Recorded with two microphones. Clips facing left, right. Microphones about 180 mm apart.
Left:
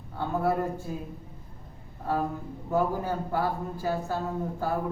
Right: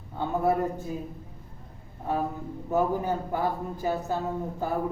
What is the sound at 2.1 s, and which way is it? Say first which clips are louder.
A woman's voice: even; 20° right (ahead or behind).